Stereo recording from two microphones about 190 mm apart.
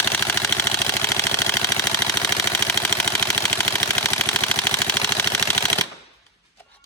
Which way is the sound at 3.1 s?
15° left (ahead or behind).